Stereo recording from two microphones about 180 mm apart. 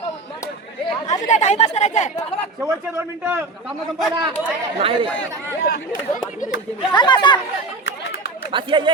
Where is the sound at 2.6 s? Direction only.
10° right (ahead or behind).